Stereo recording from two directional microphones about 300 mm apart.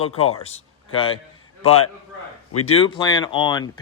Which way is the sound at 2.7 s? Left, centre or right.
Centre.